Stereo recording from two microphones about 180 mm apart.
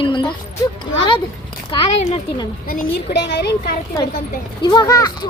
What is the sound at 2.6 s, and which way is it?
A woman's voice, 50° left (ahead or behind).